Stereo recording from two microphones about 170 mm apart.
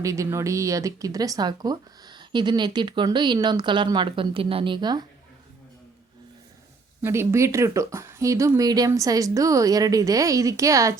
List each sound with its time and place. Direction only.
0.0 s speech: 20° right (ahead or behind)
7.0 s speech: 15° right (ahead or behind)